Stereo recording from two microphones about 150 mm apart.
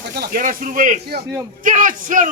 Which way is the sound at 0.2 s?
65° right (ahead or behind).